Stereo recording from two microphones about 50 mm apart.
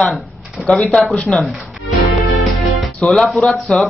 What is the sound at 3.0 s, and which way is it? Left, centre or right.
Speech, centre.